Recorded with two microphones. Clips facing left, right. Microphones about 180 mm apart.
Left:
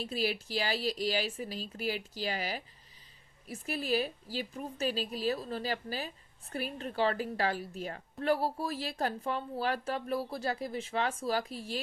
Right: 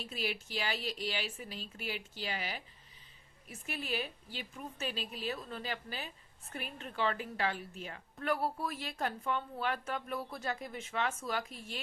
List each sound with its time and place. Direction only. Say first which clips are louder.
0.0 s a woman's voice: left 6 dB; 35° left (ahead or behind)